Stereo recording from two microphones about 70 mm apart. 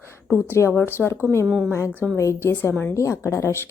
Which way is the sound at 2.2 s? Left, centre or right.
Left.